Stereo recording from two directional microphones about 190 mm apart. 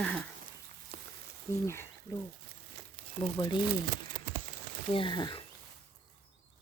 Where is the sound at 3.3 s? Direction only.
25° left (ahead or behind).